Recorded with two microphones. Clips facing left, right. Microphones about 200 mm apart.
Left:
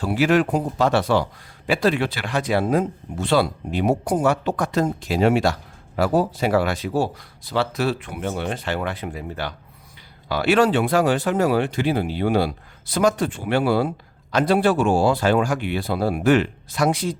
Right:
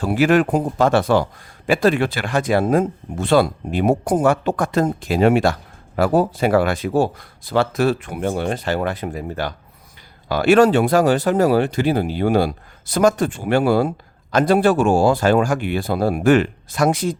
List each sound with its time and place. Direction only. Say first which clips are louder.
0.0 s speech: right 3 dB; 50° right (ahead or behind)